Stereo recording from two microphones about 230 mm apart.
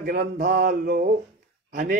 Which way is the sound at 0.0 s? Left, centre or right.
Right.